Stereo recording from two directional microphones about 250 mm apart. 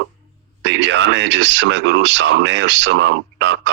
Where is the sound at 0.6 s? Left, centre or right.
Right.